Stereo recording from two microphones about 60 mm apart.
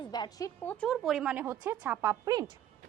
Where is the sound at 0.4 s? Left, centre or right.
Left.